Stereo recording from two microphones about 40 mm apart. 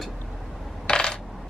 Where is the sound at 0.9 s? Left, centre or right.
Centre.